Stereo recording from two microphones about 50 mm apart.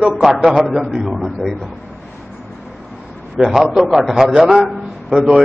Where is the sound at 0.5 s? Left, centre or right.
Centre.